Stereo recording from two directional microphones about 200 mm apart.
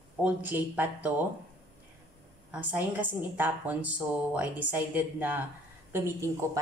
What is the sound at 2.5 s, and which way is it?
A woman's voice, 10° right (ahead or behind).